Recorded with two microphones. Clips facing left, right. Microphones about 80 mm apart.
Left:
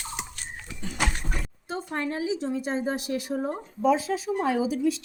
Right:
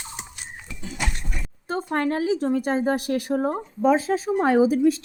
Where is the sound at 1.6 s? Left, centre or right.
Right.